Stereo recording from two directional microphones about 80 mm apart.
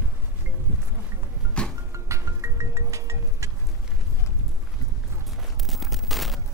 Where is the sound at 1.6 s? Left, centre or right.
Centre.